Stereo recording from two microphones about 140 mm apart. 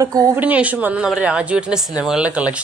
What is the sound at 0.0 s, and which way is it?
Speech, 25° right (ahead or behind).